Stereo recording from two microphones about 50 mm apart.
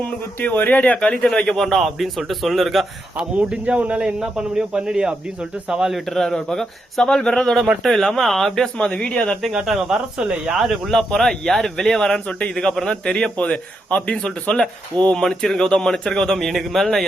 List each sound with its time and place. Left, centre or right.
0.3 s speech: left
0.7 s speech: left
1.4 s speech: centre
1.7 s a man's voice: centre
3.3 s speech: right
6.1 s speech: centre
7.4 s a man's voice: centre
9.5 s speech: centre
10.6 s speech: centre
13.3 s speech: left; by 16.5 s centre
16.5 s a man's voice: centre